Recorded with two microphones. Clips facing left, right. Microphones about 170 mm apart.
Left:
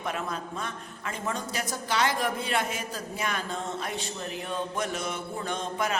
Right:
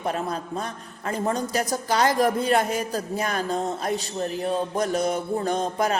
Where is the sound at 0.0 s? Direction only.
35° right (ahead or behind).